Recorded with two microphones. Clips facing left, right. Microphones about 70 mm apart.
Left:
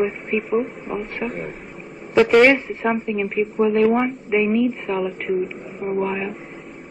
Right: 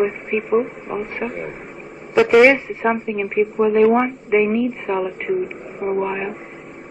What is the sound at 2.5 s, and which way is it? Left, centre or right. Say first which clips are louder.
Speech: right 1 dB; centre.